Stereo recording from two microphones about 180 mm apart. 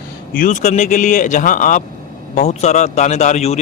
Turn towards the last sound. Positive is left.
turn(degrees=40)  # may be behind; listen again after turning